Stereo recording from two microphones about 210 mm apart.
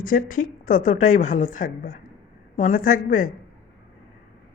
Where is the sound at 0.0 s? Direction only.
40° left (ahead or behind).